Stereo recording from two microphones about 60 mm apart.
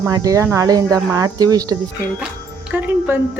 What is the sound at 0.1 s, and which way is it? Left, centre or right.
Speech, right.